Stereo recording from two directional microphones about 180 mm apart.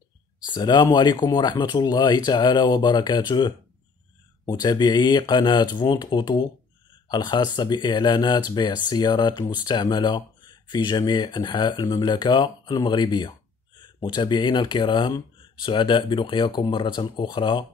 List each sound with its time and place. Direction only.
0.5 s speech: 25° left (ahead or behind)